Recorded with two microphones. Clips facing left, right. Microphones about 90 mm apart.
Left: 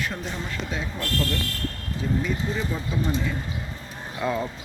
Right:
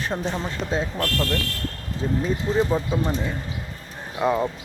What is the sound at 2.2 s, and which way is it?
Speech, 35° right (ahead or behind).